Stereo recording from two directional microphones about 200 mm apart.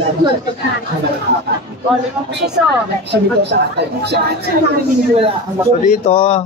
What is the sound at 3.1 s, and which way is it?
A woman's voice, 55° right (ahead or behind).